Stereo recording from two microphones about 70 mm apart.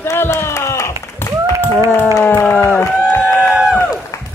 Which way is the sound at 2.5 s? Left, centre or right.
Left.